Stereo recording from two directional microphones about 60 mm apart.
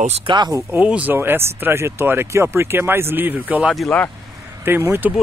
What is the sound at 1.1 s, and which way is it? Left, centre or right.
Speech, right.